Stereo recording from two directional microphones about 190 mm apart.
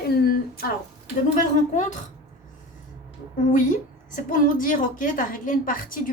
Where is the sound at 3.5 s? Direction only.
45° left (ahead or behind).